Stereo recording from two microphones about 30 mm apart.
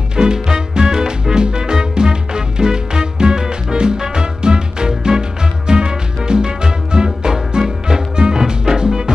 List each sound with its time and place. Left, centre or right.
0.1 s music: right